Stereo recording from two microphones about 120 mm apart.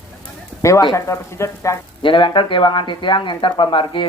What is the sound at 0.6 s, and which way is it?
Speech, 25° left (ahead or behind).